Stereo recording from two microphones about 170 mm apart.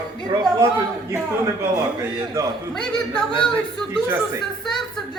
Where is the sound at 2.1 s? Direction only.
20° right (ahead or behind).